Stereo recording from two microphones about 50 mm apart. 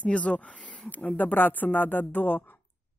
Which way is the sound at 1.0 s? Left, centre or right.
Left.